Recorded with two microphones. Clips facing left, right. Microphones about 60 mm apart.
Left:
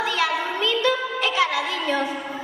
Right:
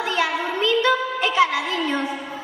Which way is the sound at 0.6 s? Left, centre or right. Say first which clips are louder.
Right 4 dB; right.